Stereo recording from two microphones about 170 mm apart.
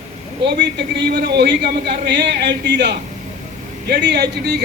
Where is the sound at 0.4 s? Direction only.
85° right.